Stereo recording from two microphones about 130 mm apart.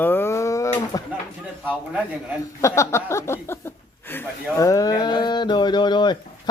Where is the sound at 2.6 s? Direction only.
20° left (ahead or behind).